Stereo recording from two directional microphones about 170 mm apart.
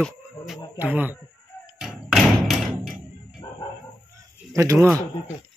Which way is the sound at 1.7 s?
Centre (ahead or behind).